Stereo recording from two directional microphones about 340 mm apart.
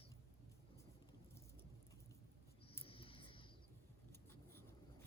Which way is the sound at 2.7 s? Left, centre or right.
Centre.